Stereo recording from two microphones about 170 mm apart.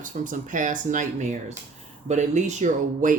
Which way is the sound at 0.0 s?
50° right (ahead or behind).